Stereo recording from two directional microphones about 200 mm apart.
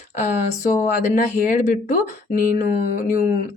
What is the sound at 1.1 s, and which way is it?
Speech, 40° left (ahead or behind).